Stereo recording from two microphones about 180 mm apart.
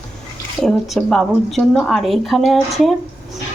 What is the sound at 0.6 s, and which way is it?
A woman's voice, 5° left (ahead or behind).